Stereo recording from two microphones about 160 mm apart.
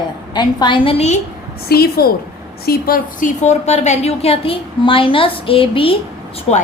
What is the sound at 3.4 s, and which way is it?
A woman's voice, 45° left (ahead or behind).